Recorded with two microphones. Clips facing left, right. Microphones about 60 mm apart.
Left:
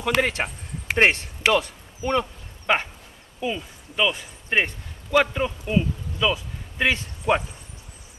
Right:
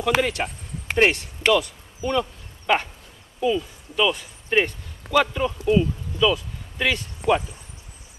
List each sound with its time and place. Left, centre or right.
0.0 s speech: left
1.5 s a sound: left
3.4 s speech: left
7.2 s speech: right